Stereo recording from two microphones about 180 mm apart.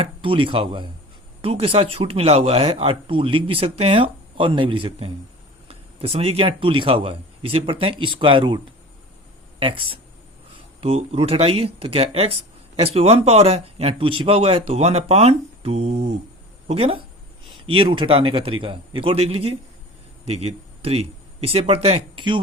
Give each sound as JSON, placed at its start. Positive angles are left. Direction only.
{"t": 0.0, "sound": "a man's voice", "side_deg": -30}